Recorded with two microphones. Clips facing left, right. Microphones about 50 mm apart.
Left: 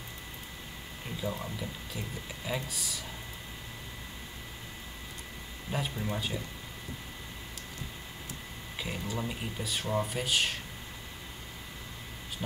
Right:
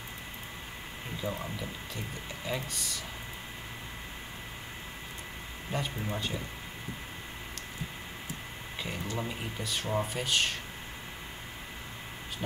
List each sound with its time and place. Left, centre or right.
1.4 s speech: centre
5.7 s speech: centre
8.7 s speech: centre
12.4 s speech: centre